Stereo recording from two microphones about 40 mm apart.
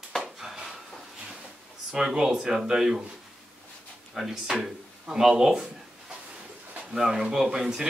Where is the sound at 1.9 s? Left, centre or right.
Centre.